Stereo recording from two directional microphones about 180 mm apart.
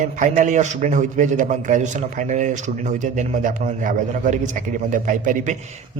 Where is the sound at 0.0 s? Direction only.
45° right (ahead or behind).